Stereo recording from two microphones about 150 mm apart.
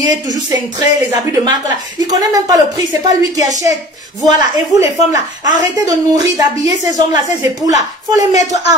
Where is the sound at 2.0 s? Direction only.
25° right (ahead or behind).